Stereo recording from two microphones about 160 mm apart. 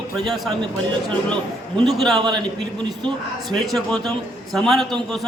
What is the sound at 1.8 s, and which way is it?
Speech, centre (ahead or behind).